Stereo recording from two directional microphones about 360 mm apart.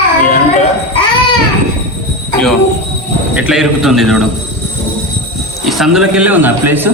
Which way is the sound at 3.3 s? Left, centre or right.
Centre.